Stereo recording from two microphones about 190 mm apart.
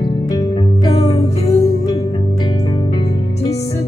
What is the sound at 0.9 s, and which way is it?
Music, 30° left (ahead or behind).